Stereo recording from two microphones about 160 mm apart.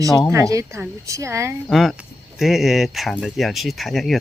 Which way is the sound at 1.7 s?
Centre (ahead or behind).